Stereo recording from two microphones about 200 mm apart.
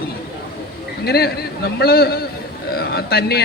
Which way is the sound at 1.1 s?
50° left (ahead or behind).